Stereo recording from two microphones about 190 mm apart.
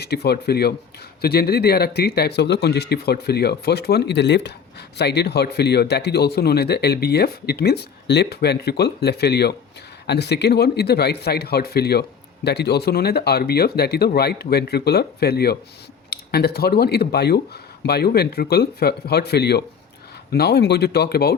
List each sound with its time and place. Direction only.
0.0 s speech: 60° left (ahead or behind)